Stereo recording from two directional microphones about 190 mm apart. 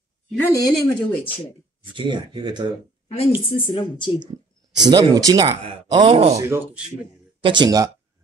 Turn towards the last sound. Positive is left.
turn(degrees=-20)  # may be behind; listen again after turning